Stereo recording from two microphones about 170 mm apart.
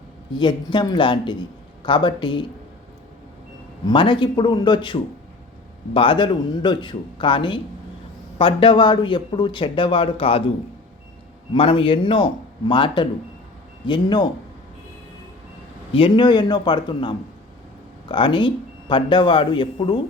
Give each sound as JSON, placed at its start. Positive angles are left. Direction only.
{"t": 0.3, "sound": "speech", "side_deg": 25}
{"t": 3.8, "sound": "speech", "side_deg": 30}
{"t": 11.5, "sound": "speech", "side_deg": 30}
{"t": 15.9, "sound": "speech", "side_deg": 30}